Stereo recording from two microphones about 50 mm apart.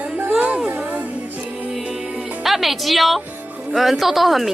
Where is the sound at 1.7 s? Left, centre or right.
Centre.